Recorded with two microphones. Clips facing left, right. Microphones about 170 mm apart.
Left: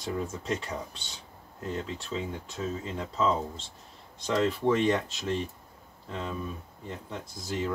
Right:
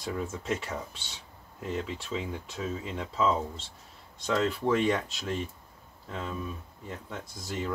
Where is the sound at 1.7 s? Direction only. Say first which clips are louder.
Right 1 dB; 5° right (ahead or behind).